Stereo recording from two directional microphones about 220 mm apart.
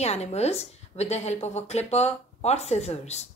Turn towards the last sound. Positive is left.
turn(degrees=30)  # may be behind; listen again after turning